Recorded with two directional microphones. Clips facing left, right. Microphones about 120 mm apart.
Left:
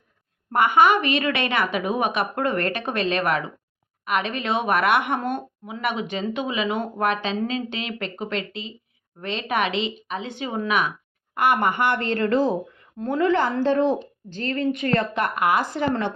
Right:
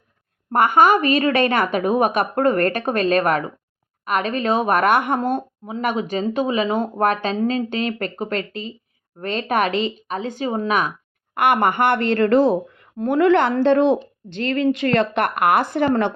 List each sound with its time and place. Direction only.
0.5 s a woman's voice: 45° right (ahead or behind)
11.3 s a woman's voice: 60° right (ahead or behind); by 14.8 s 90° right
14.9 s speech: 65° right (ahead or behind)